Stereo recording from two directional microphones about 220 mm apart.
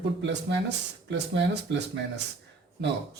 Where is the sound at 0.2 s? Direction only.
50° right (ahead or behind).